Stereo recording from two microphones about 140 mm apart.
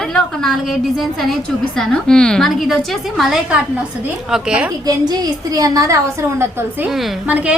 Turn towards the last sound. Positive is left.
turn(degrees=-10)  # may be behind; listen again after turning